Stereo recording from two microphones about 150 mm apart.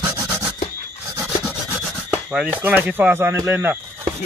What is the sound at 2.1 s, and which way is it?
Speech, 10° right (ahead or behind).